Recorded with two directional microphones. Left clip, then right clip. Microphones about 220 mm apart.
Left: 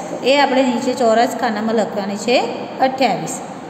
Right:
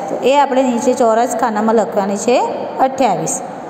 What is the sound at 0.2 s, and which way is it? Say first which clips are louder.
A woman's voice: right 2 dB; 20° right (ahead or behind).